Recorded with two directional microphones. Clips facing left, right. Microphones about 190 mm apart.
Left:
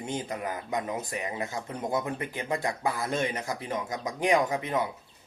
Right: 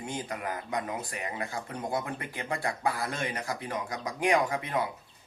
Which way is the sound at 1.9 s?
20° left (ahead or behind).